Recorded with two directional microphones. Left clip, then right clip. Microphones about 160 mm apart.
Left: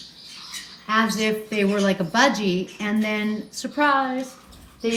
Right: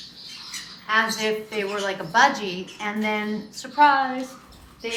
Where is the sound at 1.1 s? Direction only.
35° right (ahead or behind).